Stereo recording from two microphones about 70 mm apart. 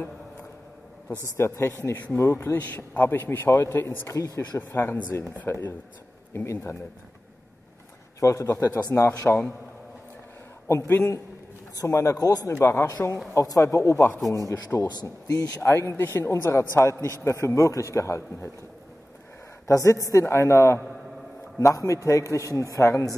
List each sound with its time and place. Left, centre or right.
1.2 s speech: left
2.5 s a man's voice: left
3.7 s a man's voice: left
8.2 s a man's voice: left
8.9 s speech: left
10.7 s a man's voice: left
12.4 s a man's voice: left
14.9 s speech: left
15.6 s a man's voice: left
19.7 s a man's voice: left
21.5 s a man's voice: left